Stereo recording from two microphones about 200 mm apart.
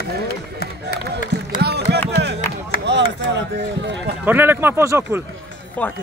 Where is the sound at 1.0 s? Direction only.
55° right (ahead or behind).